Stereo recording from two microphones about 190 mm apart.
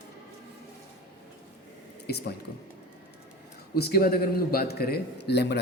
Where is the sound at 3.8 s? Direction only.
55° left (ahead or behind).